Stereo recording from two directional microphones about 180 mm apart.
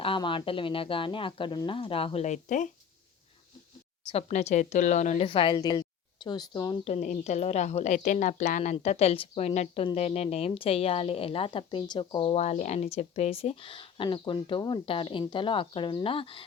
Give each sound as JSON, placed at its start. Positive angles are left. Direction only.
{"t": 0.0, "sound": "speech", "side_deg": 30}
{"t": 4.1, "sound": "a woman's voice", "side_deg": 35}
{"t": 5.3, "sound": "speech", "side_deg": 25}
{"t": 6.8, "sound": "a woman's voice", "side_deg": 40}